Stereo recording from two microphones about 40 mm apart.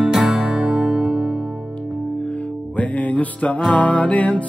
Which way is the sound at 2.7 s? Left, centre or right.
Left.